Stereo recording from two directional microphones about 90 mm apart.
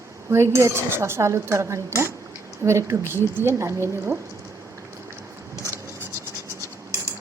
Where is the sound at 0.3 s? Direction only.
30° right (ahead or behind).